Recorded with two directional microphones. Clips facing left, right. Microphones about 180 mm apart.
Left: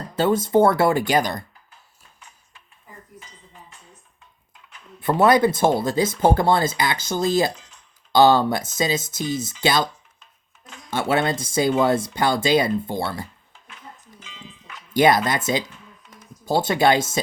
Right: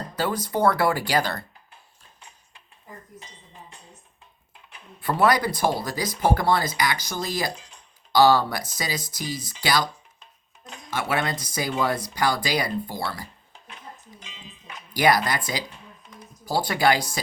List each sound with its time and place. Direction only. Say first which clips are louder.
0.2 s speech: left 7 dB; 25° left (ahead or behind)
4.9 s speech: left 5 dB; 20° left (ahead or behind)
10.9 s speech: left 5 dB; 25° left (ahead or behind)
14.3 s music: left 2 dB; 20° right (ahead or behind)
14.9 s speech: left 4 dB; 25° left (ahead or behind)